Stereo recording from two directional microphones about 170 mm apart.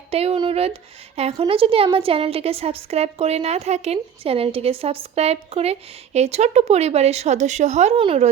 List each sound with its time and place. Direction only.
0.1 s a woman's voice: 35° right (ahead or behind)